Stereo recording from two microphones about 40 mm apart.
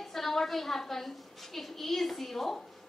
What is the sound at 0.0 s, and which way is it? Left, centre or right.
A woman's voice, centre.